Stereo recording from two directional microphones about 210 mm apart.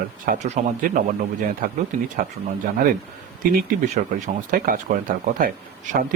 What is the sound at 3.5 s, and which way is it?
Speech, 40° right (ahead or behind).